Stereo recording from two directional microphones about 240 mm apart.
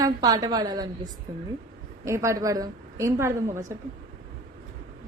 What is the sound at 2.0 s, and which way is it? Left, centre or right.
A woman's voice, centre.